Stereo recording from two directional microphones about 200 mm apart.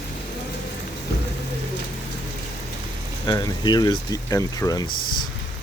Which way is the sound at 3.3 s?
20° left (ahead or behind).